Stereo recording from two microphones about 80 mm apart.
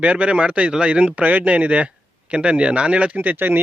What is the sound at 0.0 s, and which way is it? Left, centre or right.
Speech, centre.